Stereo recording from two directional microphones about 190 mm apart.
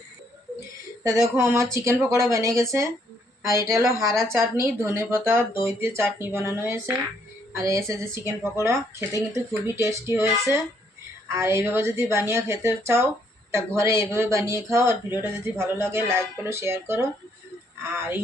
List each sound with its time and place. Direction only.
1.4 s speech: 15° right (ahead or behind)
3.8 s speech: centre (ahead or behind)
4.3 s speech: 15° right (ahead or behind)